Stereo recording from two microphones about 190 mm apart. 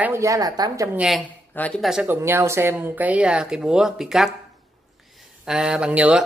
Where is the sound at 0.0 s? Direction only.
15° right (ahead or behind).